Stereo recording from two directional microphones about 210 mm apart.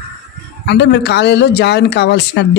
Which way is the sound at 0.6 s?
55° left (ahead or behind).